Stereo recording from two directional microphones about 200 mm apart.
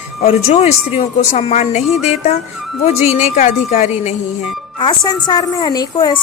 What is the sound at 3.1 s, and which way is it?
A woman's voice, 35° left (ahead or behind).